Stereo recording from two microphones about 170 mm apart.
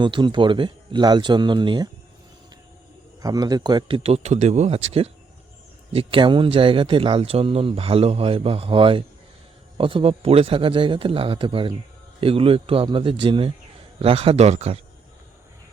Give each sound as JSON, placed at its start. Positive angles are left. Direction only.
{"t": 0.0, "sound": "speech", "side_deg": -25}
{"t": 3.2, "sound": "speech", "side_deg": -20}